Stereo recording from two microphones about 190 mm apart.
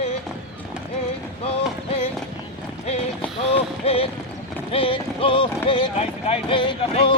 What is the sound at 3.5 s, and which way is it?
Speech, 30° left (ahead or behind).